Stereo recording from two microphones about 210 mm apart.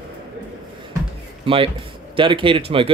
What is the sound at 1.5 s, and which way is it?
Speech, 25° right (ahead or behind).